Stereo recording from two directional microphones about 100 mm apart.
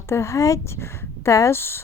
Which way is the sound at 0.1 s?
30° left (ahead or behind).